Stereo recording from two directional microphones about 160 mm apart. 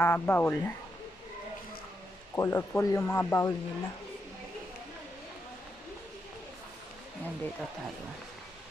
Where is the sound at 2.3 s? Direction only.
15° left (ahead or behind).